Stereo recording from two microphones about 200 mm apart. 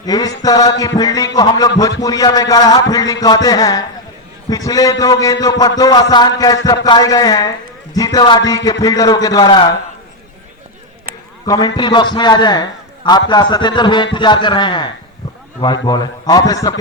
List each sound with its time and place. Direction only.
0.0 s a man's voice: 20° left (ahead or behind)
11.4 s a man's voice: 20° left (ahead or behind)